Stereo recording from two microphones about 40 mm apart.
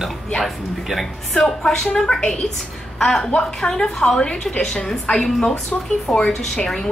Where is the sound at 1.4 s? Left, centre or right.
Centre.